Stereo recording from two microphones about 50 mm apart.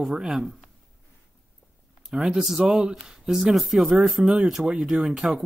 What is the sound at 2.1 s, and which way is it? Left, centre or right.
Speech, centre.